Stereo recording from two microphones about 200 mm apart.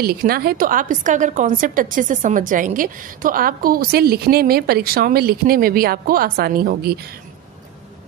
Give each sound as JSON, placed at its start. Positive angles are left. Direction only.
{"t": 0.0, "sound": "a woman's voice", "side_deg": -50}